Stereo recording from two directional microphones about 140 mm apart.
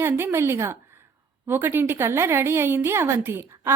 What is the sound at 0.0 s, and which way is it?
A woman's voice, 15° right (ahead or behind).